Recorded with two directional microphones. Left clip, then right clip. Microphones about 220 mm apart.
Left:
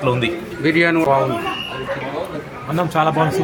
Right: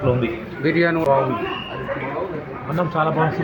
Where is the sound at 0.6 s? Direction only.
15° left (ahead or behind).